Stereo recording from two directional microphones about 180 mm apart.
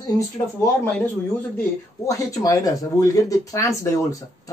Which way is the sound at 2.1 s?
20° left (ahead or behind).